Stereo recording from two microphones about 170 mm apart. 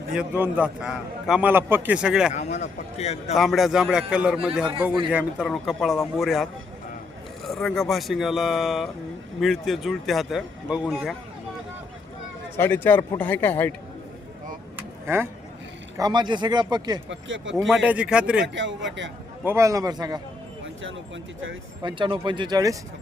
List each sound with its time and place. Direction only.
0.1 s a man's voice: 10° right (ahead or behind)
2.3 s a man's voice: 45° left (ahead or behind)
3.3 s speech: centre (ahead or behind)
12.5 s a man's voice: 15° left (ahead or behind)
15.0 s speech: 15° right (ahead or behind)
16.0 s speech: 25° right (ahead or behind)
17.1 s a man's voice: 90° right
17.7 s speech: 5° right (ahead or behind)
18.4 s a man's voice: 90° right
19.5 s speech: 15° right (ahead or behind)
21.8 s speech: 30° right (ahead or behind)